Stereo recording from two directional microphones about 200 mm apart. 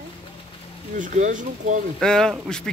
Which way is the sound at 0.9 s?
40° right (ahead or behind).